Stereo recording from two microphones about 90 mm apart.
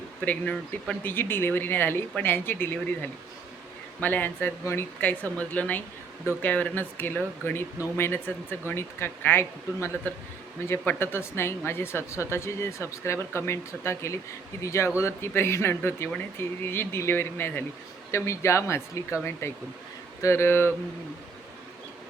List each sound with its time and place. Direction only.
0.3 s speech: 15° left (ahead or behind)
1.1 s speech: 25° left (ahead or behind)
4.9 s speech: 15° left (ahead or behind)